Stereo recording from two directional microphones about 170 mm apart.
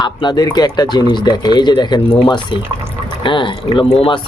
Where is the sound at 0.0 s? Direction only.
25° left (ahead or behind).